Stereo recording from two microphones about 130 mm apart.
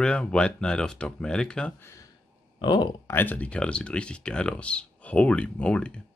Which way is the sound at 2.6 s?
35° left (ahead or behind).